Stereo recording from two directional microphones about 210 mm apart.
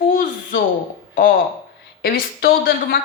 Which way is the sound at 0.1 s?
40° left (ahead or behind).